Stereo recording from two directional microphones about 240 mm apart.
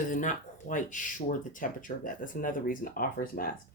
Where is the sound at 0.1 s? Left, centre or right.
Left.